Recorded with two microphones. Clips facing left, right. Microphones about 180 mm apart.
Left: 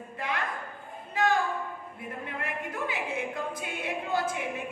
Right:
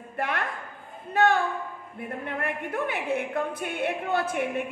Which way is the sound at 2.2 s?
60° right (ahead or behind).